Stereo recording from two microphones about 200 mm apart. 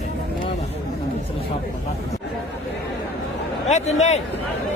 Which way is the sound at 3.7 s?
35° left (ahead or behind).